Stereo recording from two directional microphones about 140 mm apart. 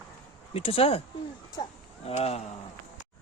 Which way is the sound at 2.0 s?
50° left (ahead or behind).